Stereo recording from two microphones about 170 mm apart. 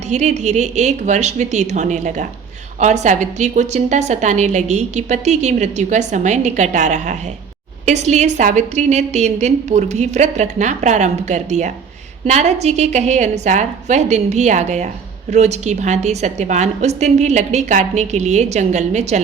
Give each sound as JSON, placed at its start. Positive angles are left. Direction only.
{"t": 0.1, "sound": "a woman's voice", "side_deg": -40}